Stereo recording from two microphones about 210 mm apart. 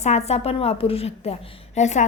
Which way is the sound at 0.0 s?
30° left (ahead or behind).